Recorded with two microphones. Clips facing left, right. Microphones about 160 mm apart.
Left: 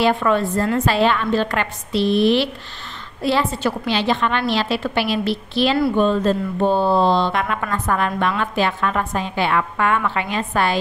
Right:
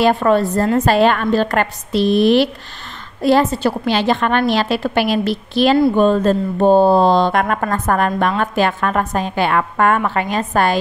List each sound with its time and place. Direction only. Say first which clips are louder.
0.0 s a woman's voice: right 4 dB; 40° right (ahead or behind)